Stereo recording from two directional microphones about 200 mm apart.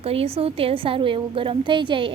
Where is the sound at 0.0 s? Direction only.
30° right (ahead or behind).